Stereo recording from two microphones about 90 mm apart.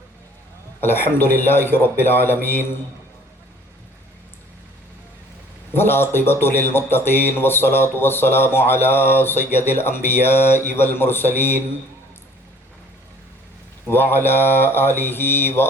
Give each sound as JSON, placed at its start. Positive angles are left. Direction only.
{"t": 0.8, "sound": "speech", "side_deg": 25}
{"t": 5.7, "sound": "speech", "side_deg": 25}
{"t": 13.8, "sound": "speech", "side_deg": 25}